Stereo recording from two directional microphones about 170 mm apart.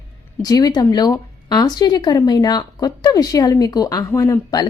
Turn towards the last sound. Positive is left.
turn(degrees=20)  # may be behind; listen again after turning